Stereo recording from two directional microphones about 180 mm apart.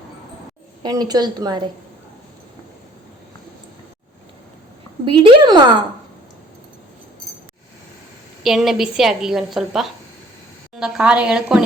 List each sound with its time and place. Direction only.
0.8 s a woman's voice: 20° right (ahead or behind)
5.0 s a sound: 30° right (ahead or behind)
8.4 s a woman's voice: centre (ahead or behind)